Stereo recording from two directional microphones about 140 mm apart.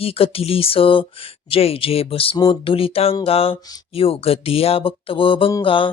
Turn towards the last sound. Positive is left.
turn(degrees=40)  # may be behind; listen again after turning